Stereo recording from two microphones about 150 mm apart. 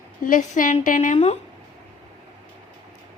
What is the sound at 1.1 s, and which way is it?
Speech, 45° left (ahead or behind).